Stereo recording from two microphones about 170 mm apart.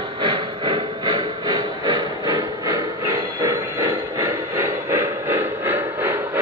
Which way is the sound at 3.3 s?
20° right (ahead or behind).